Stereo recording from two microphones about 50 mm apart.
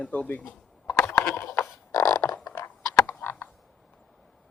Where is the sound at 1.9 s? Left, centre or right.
Left.